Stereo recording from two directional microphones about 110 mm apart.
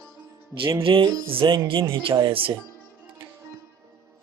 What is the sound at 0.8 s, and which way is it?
Speech, 55° right (ahead or behind).